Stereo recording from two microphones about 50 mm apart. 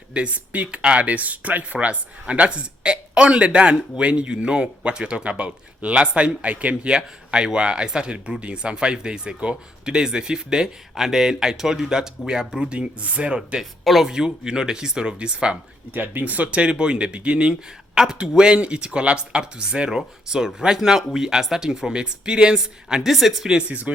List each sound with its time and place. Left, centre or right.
0.1 s speech: right
13.6 s speech: centre
14.1 s speech: centre
15.9 s speech: right; by 23.5 s centre
23.5 s speech: right